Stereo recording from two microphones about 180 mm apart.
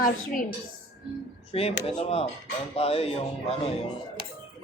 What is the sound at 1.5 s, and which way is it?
Speech, 35° left (ahead or behind).